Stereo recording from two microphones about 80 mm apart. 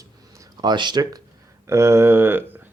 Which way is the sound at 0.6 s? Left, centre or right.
Right.